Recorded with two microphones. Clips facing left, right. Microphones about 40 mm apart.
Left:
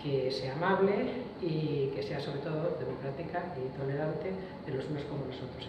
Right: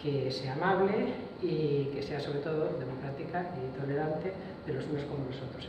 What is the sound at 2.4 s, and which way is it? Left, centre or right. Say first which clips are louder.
Speech: right 2 dB; centre.